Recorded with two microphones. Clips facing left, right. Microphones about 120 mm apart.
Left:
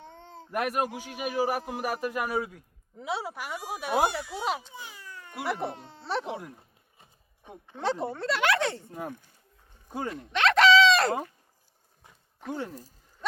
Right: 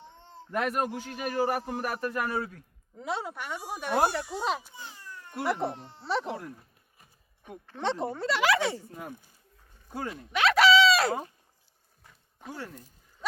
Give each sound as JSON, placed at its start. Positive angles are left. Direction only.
{"t": 0.5, "sound": "a man's voice", "side_deg": 10}
{"t": 3.0, "sound": "speech", "side_deg": 5}
{"t": 6.6, "sound": "horse", "side_deg": 25}
{"t": 7.8, "sound": "speech", "side_deg": 0}
{"t": 10.3, "sound": "a sound", "side_deg": -5}